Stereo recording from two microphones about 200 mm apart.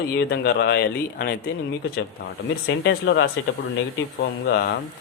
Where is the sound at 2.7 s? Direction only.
60° left (ahead or behind).